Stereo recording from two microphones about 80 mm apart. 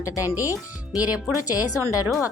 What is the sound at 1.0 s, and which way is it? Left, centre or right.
Speech, centre.